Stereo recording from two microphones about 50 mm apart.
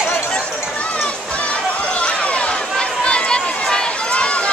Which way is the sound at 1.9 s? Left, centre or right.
Left.